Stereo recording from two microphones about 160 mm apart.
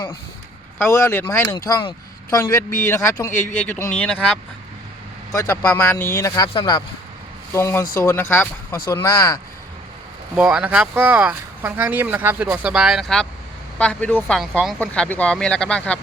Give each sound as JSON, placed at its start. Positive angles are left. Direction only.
{"t": 0.8, "sound": "speech", "side_deg": 20}
{"t": 5.3, "sound": "speech", "side_deg": 20}
{"t": 7.5, "sound": "speech", "side_deg": 15}
{"t": 10.3, "sound": "speech", "side_deg": -5}